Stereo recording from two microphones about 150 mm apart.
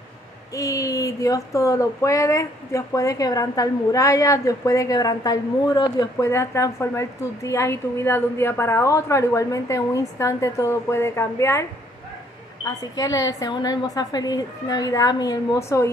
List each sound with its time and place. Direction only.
0.6 s speech: 20° left (ahead or behind)
12.6 s speech: 25° left (ahead or behind)